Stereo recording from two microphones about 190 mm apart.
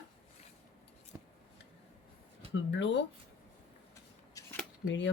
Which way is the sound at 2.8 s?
70° left (ahead or behind).